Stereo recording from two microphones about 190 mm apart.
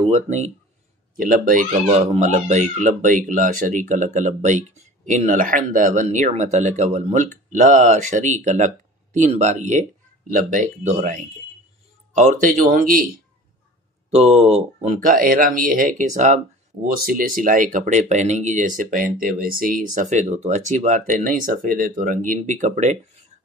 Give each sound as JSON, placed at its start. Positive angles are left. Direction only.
{"t": 0.1, "sound": "speech", "side_deg": -40}
{"t": 14.1, "sound": "speech", "side_deg": -35}